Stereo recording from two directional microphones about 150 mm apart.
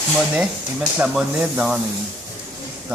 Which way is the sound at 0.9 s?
5° right (ahead or behind).